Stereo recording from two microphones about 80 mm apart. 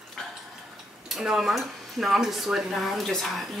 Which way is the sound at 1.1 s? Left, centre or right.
Centre.